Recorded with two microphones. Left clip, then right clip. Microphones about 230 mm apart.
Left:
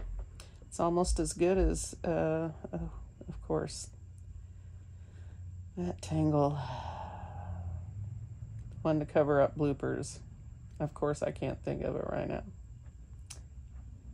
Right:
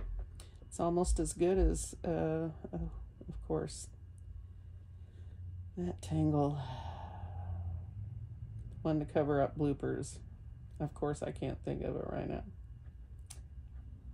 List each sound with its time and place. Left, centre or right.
0.4 s a sound: left
1.3 s speech: left
5.8 s speech: left
8.8 s speech: left